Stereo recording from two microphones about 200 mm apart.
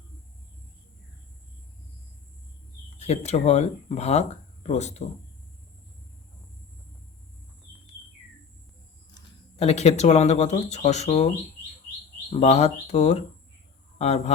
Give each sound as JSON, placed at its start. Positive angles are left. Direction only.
{"t": 3.0, "sound": "speech", "side_deg": 30}
{"t": 9.1, "sound": "speech", "side_deg": 25}
{"t": 12.3, "sound": "speech", "side_deg": 35}